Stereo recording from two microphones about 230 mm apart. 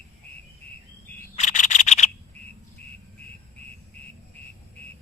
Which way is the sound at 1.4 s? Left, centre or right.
Left.